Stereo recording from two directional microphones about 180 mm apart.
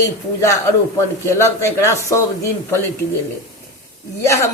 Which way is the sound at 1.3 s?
15° left (ahead or behind).